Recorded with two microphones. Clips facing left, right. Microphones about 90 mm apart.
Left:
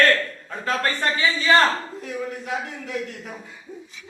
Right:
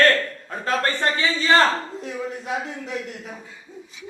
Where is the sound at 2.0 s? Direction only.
25° right (ahead or behind).